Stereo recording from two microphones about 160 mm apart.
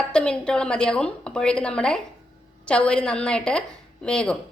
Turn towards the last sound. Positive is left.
turn(degrees=5)  # may be behind; listen again after turning